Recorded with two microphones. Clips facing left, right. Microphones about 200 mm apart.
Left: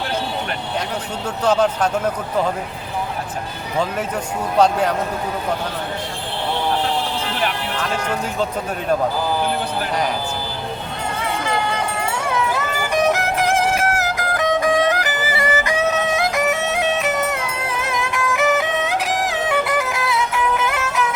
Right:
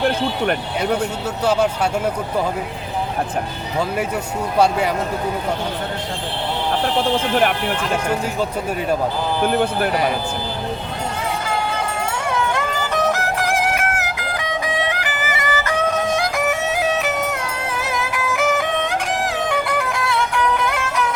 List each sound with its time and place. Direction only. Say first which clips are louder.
1.5 s speech: left 1 dB; 10° right (ahead or behind)
4.5 s speech: left 1 dB; 10° right (ahead or behind)
12.3 s music: right 1 dB; 5° left (ahead or behind)
12.9 s music: left 3 dB; 15° left (ahead or behind)
14.0 s music: left 5 dB; 45° left (ahead or behind)
15.5 s music: right 1 dB; 15° left (ahead or behind)